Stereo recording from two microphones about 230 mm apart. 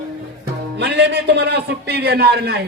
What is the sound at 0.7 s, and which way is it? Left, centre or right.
A man's voice, right.